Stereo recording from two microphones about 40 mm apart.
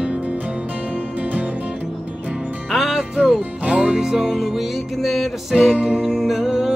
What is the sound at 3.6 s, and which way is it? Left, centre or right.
Music, right.